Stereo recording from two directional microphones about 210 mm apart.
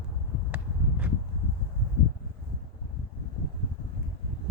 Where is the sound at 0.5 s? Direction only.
5° right (ahead or behind).